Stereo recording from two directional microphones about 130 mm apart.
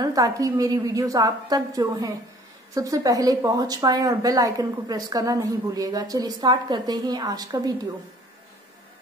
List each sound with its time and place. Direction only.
0.0 s speech: 30° right (ahead or behind)